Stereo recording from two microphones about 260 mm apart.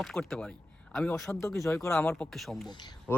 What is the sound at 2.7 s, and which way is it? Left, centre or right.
Speech, centre.